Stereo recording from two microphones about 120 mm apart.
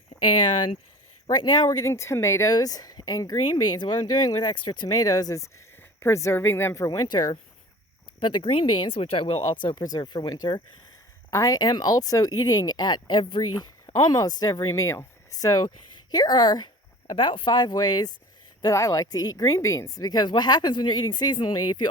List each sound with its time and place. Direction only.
1.3 s speech: 40° left (ahead or behind)
1.9 s a woman's voice: 25° left (ahead or behind)